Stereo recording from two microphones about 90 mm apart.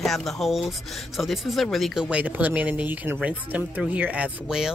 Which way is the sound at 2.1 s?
15° right (ahead or behind).